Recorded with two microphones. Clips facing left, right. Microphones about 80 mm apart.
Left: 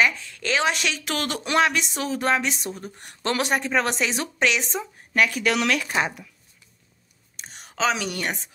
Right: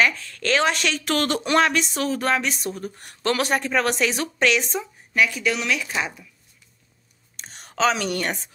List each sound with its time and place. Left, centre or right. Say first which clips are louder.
0.0 s speech: right 1 dB; centre
5.1 s speech: even; left
7.3 s speech: right 3 dB; centre